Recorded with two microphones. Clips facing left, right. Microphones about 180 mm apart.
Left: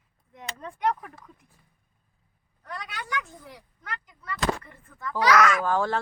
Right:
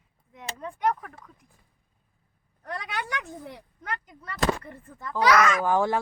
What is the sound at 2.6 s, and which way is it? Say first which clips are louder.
Speech: right 5 dB; 60° right (ahead or behind).